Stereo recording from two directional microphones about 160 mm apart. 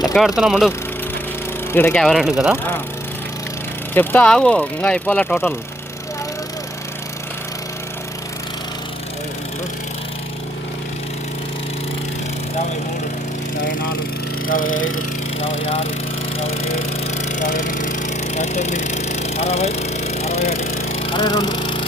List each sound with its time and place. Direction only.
0.1 s speech: centre (ahead or behind)
1.7 s speech: 15° left (ahead or behind)
2.0 s speech: centre (ahead or behind)
3.9 s speech: 10° left (ahead or behind)
14.4 s speech: 60° left (ahead or behind)
15.4 s speech: 35° left (ahead or behind)
16.4 s a sound: 40° left (ahead or behind)
21.1 s speech: 25° left (ahead or behind)